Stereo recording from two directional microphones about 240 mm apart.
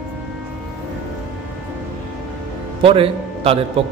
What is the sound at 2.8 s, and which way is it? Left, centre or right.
A man's voice, right.